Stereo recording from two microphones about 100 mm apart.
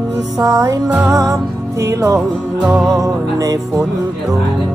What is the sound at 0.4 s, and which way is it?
Music, 35° right (ahead or behind).